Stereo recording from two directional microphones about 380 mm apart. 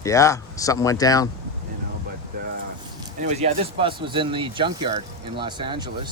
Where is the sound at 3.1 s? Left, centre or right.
Centre.